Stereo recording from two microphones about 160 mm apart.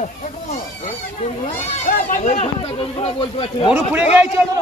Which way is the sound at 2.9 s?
35° left (ahead or behind).